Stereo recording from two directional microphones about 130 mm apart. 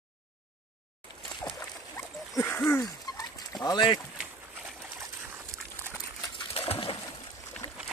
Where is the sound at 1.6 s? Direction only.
20° left (ahead or behind).